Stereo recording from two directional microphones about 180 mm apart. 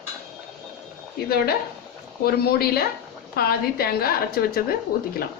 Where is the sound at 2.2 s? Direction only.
55° left (ahead or behind).